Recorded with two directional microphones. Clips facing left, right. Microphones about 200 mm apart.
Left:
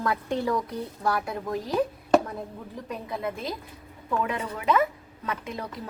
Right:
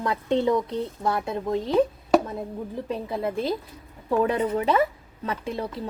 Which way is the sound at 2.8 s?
30° right (ahead or behind).